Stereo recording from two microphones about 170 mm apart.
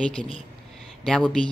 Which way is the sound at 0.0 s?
5° left (ahead or behind).